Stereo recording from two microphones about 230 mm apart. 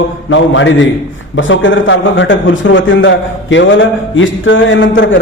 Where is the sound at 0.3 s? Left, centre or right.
Left.